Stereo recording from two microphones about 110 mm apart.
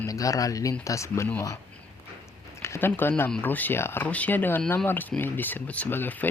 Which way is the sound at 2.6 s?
25° left (ahead or behind).